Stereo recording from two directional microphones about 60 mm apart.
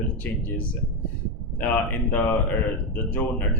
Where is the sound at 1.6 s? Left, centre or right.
Left.